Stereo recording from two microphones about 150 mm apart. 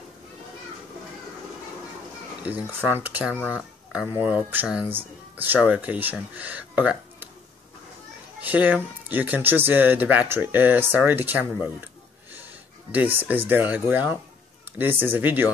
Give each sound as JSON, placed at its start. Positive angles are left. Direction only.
{"t": 2.4, "sound": "speech", "side_deg": -10}
{"t": 8.4, "sound": "speech", "side_deg": -10}
{"t": 12.9, "sound": "speech", "side_deg": -10}